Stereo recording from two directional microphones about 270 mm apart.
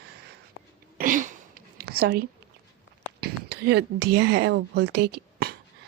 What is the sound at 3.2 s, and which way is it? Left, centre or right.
Speech, right.